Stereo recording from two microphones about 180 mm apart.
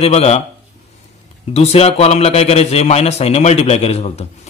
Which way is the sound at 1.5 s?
35° left (ahead or behind).